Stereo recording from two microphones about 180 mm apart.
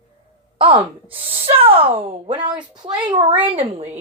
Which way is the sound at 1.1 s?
30° right (ahead or behind).